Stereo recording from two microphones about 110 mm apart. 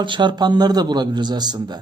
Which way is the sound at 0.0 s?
45° right (ahead or behind).